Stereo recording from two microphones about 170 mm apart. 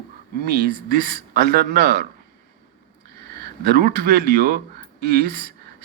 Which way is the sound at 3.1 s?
70° right (ahead or behind).